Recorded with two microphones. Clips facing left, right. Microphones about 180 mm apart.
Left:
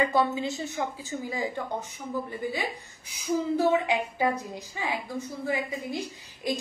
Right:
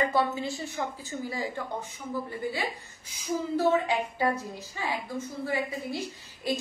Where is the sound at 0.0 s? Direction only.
15° left (ahead or behind).